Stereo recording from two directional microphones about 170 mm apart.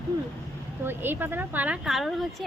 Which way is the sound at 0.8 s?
10° right (ahead or behind).